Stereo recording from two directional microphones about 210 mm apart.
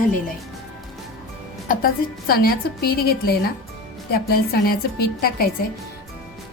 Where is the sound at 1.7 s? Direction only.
45° left (ahead or behind).